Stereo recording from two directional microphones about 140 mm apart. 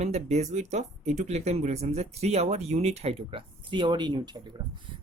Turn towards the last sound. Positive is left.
turn(degrees=-35)  # may be behind; listen again after turning